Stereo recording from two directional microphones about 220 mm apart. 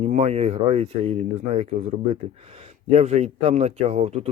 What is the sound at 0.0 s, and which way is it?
Speech, 30° right (ahead or behind).